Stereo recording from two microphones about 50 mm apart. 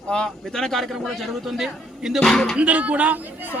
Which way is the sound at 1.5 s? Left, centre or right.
Centre.